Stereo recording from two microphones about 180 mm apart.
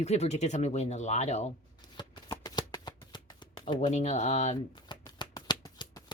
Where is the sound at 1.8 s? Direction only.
25° left (ahead or behind).